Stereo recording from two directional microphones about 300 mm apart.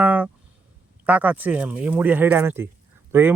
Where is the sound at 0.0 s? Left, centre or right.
Centre.